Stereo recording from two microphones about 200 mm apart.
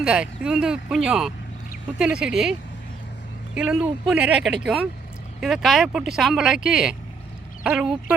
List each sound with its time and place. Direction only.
0.0 s speech: 5° right (ahead or behind)